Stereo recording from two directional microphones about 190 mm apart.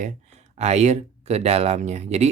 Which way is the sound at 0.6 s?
35° right (ahead or behind).